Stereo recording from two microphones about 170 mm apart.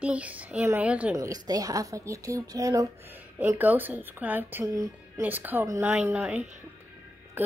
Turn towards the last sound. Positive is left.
turn(degrees=-10)  # may be behind; listen again after turning